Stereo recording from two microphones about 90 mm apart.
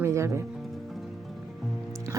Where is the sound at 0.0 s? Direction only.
30° right (ahead or behind).